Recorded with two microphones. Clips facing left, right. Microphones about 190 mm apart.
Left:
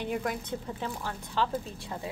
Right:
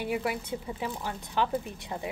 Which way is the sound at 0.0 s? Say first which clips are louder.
Right 1 dB; 10° right (ahead or behind).